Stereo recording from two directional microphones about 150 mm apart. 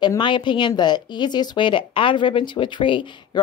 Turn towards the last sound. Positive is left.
turn(degrees=30)  # may be behind; listen again after turning